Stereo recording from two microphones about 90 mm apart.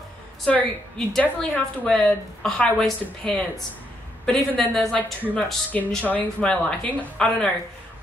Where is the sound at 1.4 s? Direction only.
10° left (ahead or behind).